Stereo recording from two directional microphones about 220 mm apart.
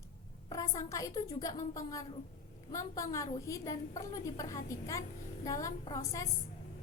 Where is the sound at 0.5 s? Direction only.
15° left (ahead or behind).